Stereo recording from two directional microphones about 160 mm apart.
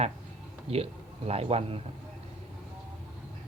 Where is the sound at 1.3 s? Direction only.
40° right (ahead or behind).